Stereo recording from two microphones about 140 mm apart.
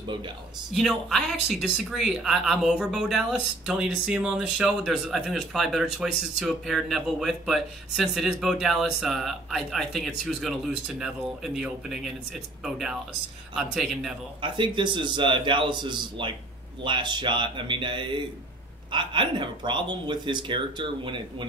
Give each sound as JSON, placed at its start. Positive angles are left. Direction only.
{"t": 0.7, "sound": "speech", "side_deg": 0}
{"t": 14.4, "sound": "speech", "side_deg": -35}